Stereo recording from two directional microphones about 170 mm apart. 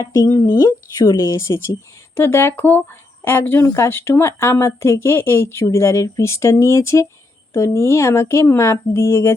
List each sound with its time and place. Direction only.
0.0 s speech: 20° left (ahead or behind)